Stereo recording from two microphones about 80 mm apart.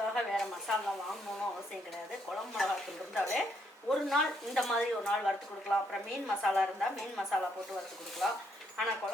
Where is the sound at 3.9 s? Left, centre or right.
Centre.